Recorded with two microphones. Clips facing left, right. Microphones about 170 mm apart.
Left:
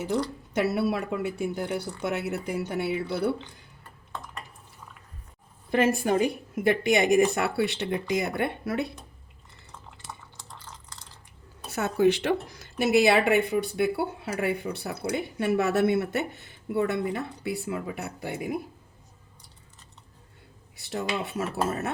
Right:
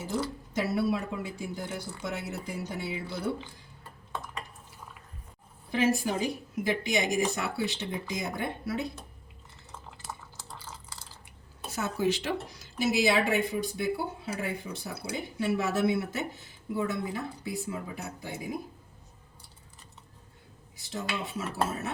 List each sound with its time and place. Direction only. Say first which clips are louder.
0.5 s speech: left 3 dB; 65° left (ahead or behind)
5.7 s speech: left 4 dB; 55° left (ahead or behind)
10.0 s a sound: right 1 dB; 5° right (ahead or behind)
11.7 s speech: left 6 dB; 60° left (ahead or behind)
20.7 s speech: left 5 dB; 65° left (ahead or behind)